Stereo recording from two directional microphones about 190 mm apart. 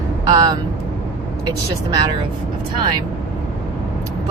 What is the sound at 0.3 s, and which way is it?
Speech, 25° right (ahead or behind).